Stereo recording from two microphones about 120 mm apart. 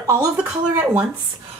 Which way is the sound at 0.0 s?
25° right (ahead or behind).